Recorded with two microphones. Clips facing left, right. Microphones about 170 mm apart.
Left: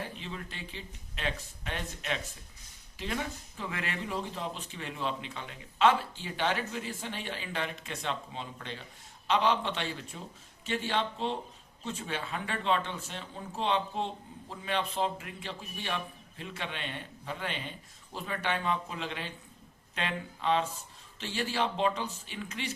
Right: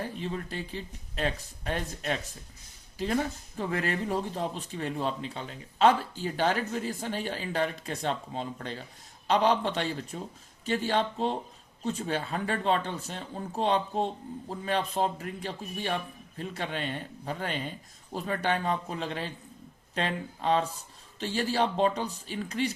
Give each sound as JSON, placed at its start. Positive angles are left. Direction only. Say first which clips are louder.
{"t": 0.0, "sound": "speech", "louder": "right 6 dB", "side_deg": -40}